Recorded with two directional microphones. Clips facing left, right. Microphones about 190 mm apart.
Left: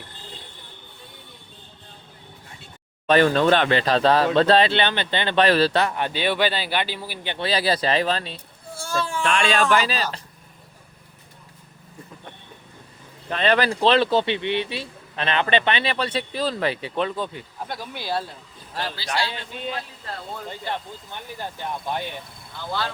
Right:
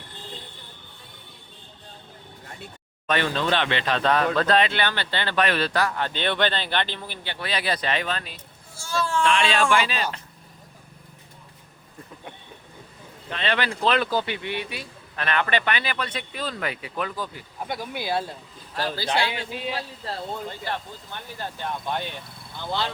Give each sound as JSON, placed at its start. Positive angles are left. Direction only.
{"t": 3.1, "sound": "speech", "side_deg": 45}
{"t": 5.4, "sound": "speech", "side_deg": 35}
{"t": 6.1, "sound": "speech", "side_deg": 10}
{"t": 7.3, "sound": "speech", "side_deg": 30}
{"t": 8.7, "sound": "baby cry", "side_deg": 50}
{"t": 9.2, "sound": "speech", "side_deg": 50}
{"t": 13.3, "sound": "speech", "side_deg": 45}
{"t": 19.1, "sound": "a man's voice", "side_deg": -15}
{"t": 20.5, "sound": "speech", "side_deg": 15}